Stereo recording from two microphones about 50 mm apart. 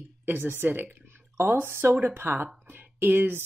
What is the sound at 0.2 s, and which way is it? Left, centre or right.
Speech, right.